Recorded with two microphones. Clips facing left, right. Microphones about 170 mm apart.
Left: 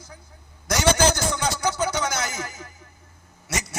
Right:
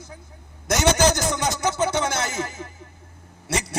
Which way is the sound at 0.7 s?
20° right (ahead or behind).